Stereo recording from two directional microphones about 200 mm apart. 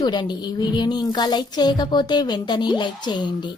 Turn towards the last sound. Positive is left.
turn(degrees=20)  # may be behind; listen again after turning